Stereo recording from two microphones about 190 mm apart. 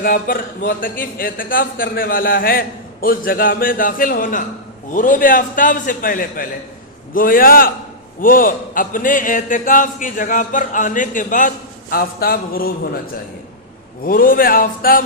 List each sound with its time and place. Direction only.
0.0 s a man's voice: 50° left (ahead or behind)
14.0 s a man's voice: 50° left (ahead or behind)